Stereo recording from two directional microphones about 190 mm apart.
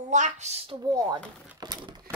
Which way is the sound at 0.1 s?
35° right (ahead or behind).